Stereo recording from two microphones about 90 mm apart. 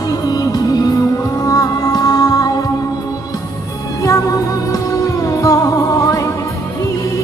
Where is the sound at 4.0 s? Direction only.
40° left (ahead or behind).